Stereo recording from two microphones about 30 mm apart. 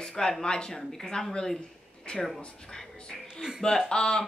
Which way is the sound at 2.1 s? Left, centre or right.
Left.